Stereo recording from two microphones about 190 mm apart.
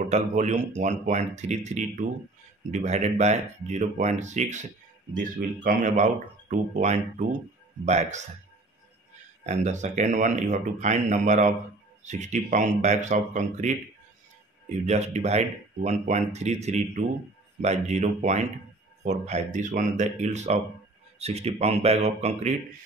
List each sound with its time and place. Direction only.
0.1 s a man's voice: 40° right (ahead or behind)
9.4 s speech: 40° right (ahead or behind)
14.9 s speech: 35° right (ahead or behind)